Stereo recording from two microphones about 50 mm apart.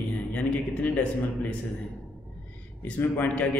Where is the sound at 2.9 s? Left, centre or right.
Left.